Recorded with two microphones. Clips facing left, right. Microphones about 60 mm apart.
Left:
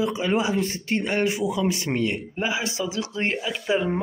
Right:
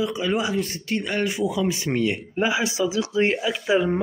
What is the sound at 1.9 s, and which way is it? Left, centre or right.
Speech, centre.